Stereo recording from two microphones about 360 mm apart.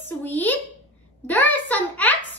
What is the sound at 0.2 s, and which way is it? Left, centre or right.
Speech, centre.